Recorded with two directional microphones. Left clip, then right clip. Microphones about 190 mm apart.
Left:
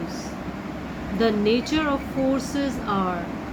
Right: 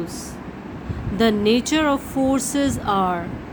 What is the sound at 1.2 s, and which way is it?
Speech, 60° right (ahead or behind).